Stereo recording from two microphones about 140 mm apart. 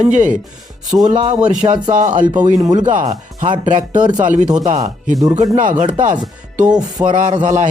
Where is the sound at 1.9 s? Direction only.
65° right (ahead or behind).